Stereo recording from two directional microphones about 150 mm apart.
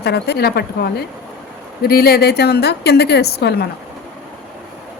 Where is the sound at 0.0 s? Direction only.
90° left.